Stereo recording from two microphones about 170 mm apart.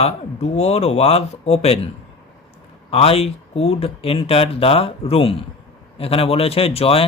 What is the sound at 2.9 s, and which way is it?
Speech, 35° left (ahead or behind).